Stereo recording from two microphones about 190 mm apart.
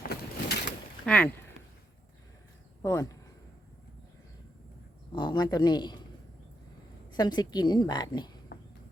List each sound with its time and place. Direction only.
0.1 s boat: 55° left (ahead or behind)
1.0 s speech: 5° left (ahead or behind)
2.8 s speech: 15° left (ahead or behind)
5.1 s a woman's voice: 25° left (ahead or behind)
7.1 s a woman's voice: 20° left (ahead or behind)